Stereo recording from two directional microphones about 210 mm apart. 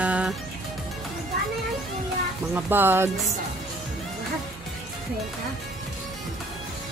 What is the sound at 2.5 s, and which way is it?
Speech, 10° right (ahead or behind).